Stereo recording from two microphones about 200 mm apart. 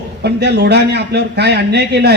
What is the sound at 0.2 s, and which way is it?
A man's voice, 55° right (ahead or behind).